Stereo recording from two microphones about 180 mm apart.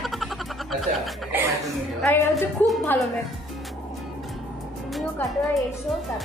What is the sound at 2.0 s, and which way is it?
Speech, 5° left (ahead or behind).